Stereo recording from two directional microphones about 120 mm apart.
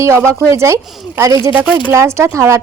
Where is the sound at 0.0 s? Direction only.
20° right (ahead or behind).